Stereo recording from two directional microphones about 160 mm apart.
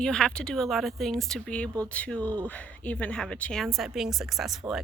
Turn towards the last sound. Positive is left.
turn(degrees=0)  # may be behind; listen again after turning